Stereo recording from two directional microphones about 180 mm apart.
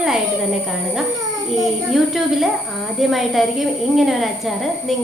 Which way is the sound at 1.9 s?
Centre (ahead or behind).